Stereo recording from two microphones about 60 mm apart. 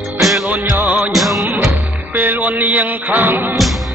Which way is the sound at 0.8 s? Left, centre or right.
Right.